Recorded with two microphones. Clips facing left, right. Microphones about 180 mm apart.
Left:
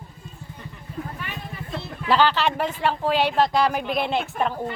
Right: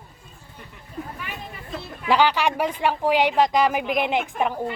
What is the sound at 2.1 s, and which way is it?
Speech, 15° right (ahead or behind).